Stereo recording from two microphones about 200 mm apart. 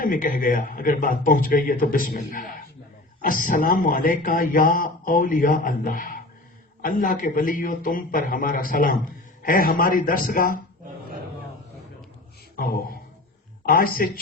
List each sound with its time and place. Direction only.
0.0 s speech: 40° left (ahead or behind)
12.5 s a man's voice: 45° left (ahead or behind)